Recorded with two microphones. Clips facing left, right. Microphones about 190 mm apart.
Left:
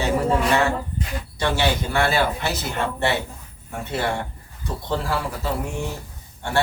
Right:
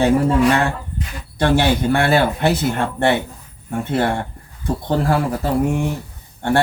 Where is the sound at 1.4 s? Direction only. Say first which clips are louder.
Right 6 dB; 55° right (ahead or behind).